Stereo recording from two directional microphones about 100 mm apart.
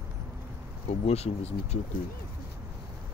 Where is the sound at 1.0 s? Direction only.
90° left.